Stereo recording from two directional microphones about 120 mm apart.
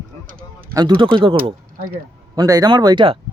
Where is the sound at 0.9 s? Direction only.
40° right (ahead or behind).